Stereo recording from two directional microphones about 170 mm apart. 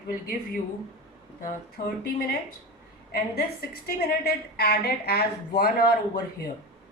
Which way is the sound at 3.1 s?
65° left (ahead or behind).